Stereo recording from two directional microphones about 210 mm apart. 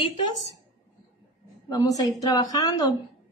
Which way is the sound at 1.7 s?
20° left (ahead or behind).